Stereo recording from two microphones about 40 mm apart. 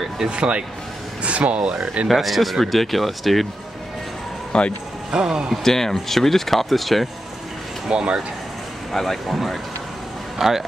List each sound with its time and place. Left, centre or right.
0.3 s speech: right
2.0 s speech: centre
4.5 s speech: left
5.1 s speech: centre
5.6 s speech: centre
7.9 s speech: right
8.9 s speech: centre
10.4 s speech: centre